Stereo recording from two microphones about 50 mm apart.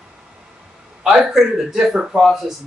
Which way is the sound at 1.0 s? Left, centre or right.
Centre.